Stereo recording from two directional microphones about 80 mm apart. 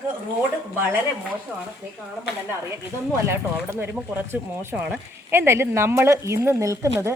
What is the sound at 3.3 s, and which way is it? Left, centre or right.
Speech, right.